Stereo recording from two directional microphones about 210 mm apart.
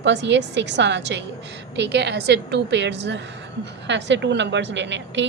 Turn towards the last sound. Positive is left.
turn(degrees=-60)  # may be behind; listen again after turning